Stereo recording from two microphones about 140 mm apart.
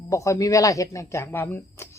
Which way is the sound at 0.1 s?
20° left (ahead or behind).